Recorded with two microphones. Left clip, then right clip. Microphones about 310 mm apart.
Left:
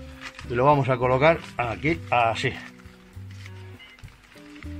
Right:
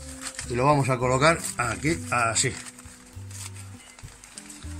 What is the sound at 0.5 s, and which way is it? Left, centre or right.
Speech, left.